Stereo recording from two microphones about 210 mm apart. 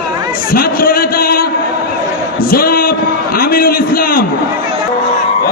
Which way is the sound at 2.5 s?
45° left (ahead or behind).